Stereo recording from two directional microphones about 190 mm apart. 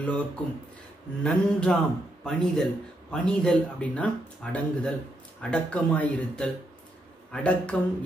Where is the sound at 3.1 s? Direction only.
5° left (ahead or behind).